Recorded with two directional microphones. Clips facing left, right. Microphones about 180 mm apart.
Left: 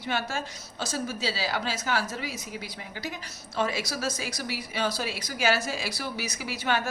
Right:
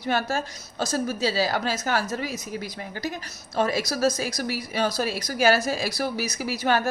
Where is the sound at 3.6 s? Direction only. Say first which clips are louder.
Right 5 dB; 40° right (ahead or behind).